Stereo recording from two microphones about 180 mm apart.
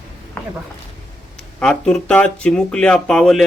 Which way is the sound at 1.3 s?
5° left (ahead or behind).